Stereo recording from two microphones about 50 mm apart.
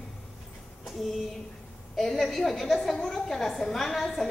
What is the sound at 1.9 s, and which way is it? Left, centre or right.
A woman's voice, centre.